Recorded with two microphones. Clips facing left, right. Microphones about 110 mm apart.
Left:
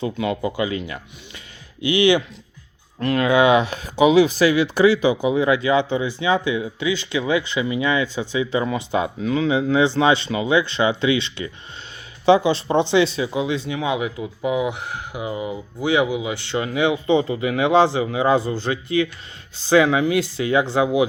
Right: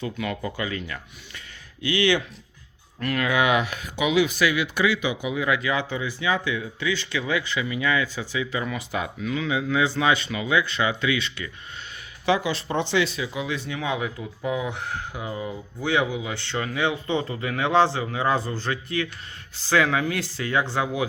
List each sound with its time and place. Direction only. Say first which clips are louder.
0.0 s speech: left 6 dB; 25° left (ahead or behind)